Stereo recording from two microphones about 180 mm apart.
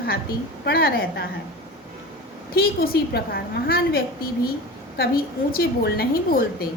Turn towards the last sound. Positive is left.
turn(degrees=60)  # may be behind; listen again after turning